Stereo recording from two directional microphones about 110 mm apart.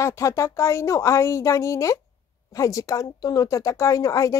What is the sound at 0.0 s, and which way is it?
Speech, 25° left (ahead or behind).